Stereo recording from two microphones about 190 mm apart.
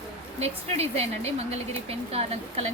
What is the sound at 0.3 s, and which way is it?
Speech, 35° right (ahead or behind).